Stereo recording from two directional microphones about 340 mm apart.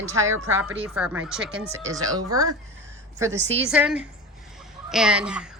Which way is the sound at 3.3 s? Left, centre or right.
Centre.